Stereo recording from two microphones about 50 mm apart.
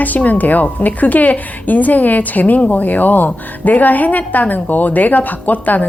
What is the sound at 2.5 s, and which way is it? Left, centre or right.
Speech, left.